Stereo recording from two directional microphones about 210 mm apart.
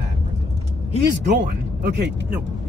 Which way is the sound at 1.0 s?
55° right (ahead or behind).